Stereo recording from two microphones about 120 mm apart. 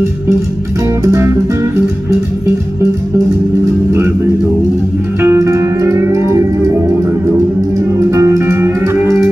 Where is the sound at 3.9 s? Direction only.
25° right (ahead or behind).